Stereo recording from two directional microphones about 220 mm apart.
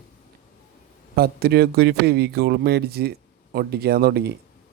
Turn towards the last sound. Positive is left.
turn(degrees=-45)  # may be behind; listen again after turning